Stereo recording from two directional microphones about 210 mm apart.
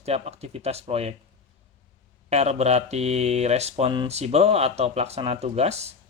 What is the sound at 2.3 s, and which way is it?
Speech, 30° right (ahead or behind).